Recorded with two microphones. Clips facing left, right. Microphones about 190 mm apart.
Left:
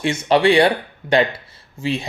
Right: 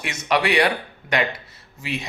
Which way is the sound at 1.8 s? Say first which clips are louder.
Left 7 dB; 30° left (ahead or behind).